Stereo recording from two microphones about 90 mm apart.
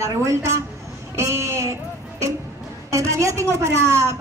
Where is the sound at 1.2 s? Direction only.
35° right (ahead or behind).